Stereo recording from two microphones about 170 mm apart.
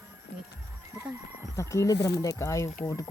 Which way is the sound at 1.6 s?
20° left (ahead or behind).